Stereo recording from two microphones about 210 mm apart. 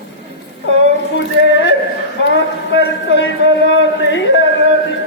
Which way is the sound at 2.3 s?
60° left (ahead or behind).